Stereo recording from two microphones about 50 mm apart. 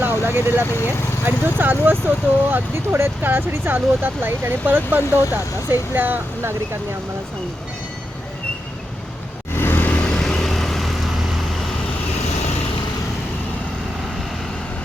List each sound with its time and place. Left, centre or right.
0.0 s speech: right
0.7 s speech: left
1.2 s speech: right
9.6 s vehicle: left
9.9 s vehicle: left
10.2 s vehicle: centre